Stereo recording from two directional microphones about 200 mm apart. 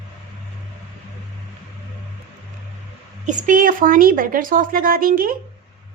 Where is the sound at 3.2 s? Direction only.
40° right (ahead or behind).